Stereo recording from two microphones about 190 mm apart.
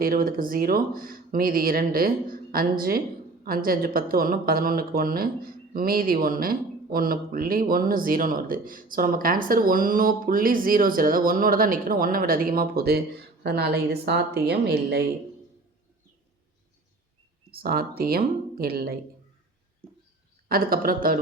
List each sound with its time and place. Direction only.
0.0 s speech: 50° right (ahead or behind)
17.5 s speech: 50° right (ahead or behind)
20.5 s speech: 50° right (ahead or behind)